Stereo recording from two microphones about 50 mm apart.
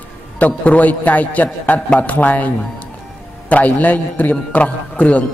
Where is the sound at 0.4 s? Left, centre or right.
Left.